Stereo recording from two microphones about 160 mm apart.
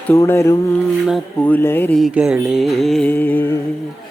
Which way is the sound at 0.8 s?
Centre (ahead or behind).